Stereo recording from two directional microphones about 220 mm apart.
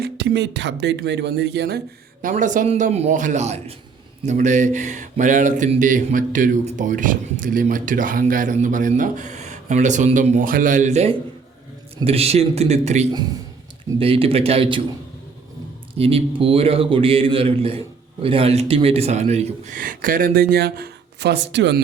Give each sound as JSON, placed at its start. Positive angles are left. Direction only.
{"t": 0.0, "sound": "speech", "side_deg": -50}
{"t": 2.2, "sound": "a man's voice", "side_deg": -35}
{"t": 16.0, "sound": "a man's voice", "side_deg": -25}